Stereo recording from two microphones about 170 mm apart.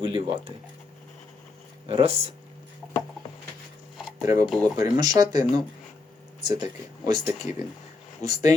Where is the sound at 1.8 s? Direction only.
35° right (ahead or behind).